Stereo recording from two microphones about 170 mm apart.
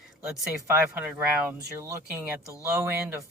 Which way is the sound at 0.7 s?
10° right (ahead or behind).